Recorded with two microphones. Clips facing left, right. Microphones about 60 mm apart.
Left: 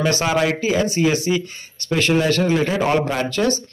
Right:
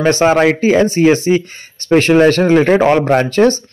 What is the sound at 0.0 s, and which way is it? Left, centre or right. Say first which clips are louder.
A man's voice: right 8 dB; right.